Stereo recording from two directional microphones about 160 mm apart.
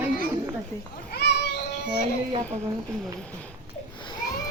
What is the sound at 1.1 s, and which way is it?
Children playing, 90° left.